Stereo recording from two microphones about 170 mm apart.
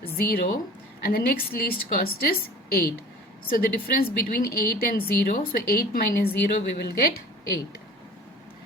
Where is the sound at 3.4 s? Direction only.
60° left (ahead or behind).